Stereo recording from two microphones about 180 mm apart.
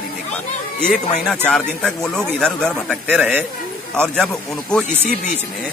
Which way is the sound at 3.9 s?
5° left (ahead or behind).